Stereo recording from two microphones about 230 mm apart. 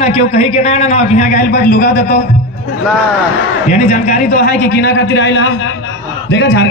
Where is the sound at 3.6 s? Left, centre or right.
Left.